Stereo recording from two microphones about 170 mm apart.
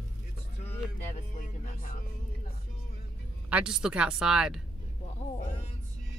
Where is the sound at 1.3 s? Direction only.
50° left (ahead or behind).